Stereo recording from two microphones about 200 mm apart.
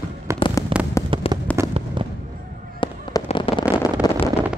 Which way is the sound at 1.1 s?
25° right (ahead or behind).